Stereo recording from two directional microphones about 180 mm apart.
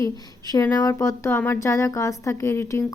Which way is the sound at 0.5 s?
20° left (ahead or behind).